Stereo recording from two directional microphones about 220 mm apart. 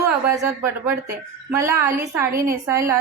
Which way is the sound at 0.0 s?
15° right (ahead or behind).